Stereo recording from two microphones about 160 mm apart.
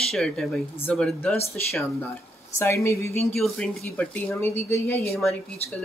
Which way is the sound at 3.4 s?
Centre (ahead or behind).